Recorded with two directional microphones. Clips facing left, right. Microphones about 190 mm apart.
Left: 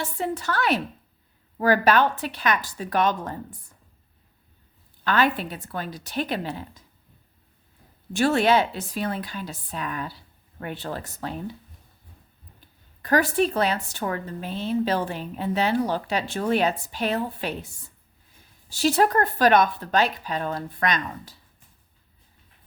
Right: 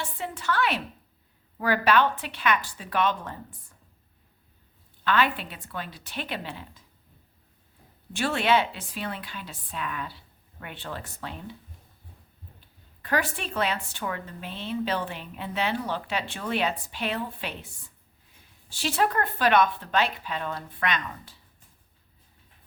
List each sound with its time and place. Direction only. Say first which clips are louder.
0.0 s speech: left 5 dB; 40° left (ahead or behind)
5.0 s speech: left 3 dB; 40° left (ahead or behind)
8.1 s speech: left 4 dB; 40° left (ahead or behind)
12.5 s speech: left 1 dB; 40° left (ahead or behind)
18.7 s speech: left 6 dB; 40° left (ahead or behind)